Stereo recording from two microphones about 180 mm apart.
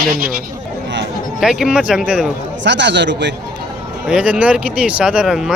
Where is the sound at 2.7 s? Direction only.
75° right (ahead or behind).